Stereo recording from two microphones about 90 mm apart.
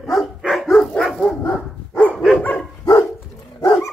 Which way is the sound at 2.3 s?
15° left (ahead or behind).